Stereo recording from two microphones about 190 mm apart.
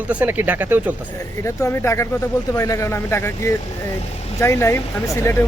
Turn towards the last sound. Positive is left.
turn(degrees=15)  # may be behind; listen again after turning